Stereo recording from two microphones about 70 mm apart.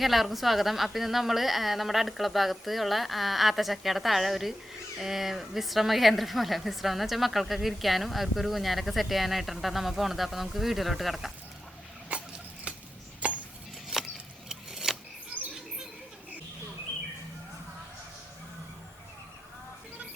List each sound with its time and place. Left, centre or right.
0.0 s a woman's voice: centre
12.7 s chopping: centre
13.2 s a sound: centre
14.5 s keys jangling: centre